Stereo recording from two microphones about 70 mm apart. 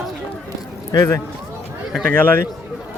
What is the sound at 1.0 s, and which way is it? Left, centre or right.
Speech, left.